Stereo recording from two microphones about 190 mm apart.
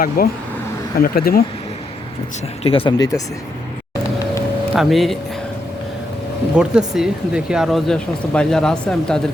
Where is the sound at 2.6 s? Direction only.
30° left (ahead or behind).